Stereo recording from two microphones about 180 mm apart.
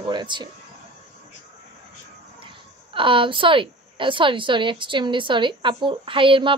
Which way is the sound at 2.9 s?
30° right (ahead or behind).